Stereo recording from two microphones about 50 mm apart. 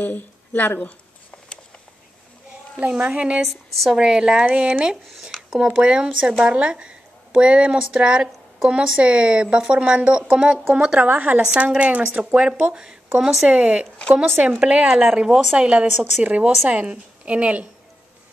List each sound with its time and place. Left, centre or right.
0.0 s speech: left
3.0 s speech: right
3.4 s a woman's voice: centre
4.0 s speech: centre
5.5 s speech: centre
5.8 s speech: right
11.1 s speech: right
13.2 s a woman's voice: centre
13.5 s speech: right
14.6 s speech: right